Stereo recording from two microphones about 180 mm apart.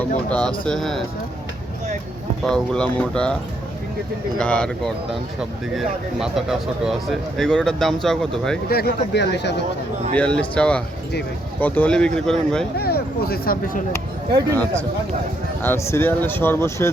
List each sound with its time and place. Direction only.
0.3 s speech: 5° left (ahead or behind)
2.4 s speech: 5° left (ahead or behind)
4.4 s speech: 5° left (ahead or behind)
8.7 s speech: 65° left (ahead or behind)
10.2 s speech: 5° left (ahead or behind)
12.7 s speech: 60° left (ahead or behind)
14.5 s speech: 5° left (ahead or behind)